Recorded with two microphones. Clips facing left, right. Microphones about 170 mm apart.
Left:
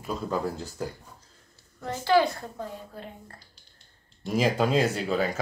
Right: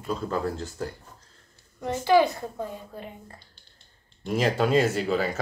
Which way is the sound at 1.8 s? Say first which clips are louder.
Right 2 dB; 15° right (ahead or behind).